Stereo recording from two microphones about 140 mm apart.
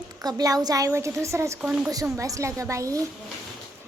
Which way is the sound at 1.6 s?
5° right (ahead or behind).